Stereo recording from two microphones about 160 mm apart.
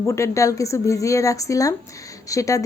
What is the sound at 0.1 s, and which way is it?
Speech, 20° left (ahead or behind).